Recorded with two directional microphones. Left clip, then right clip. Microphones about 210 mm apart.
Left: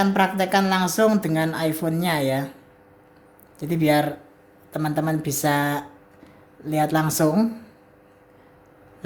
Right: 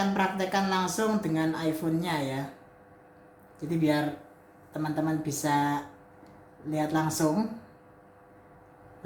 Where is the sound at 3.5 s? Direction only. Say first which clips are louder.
Left 7 dB; 55° left (ahead or behind).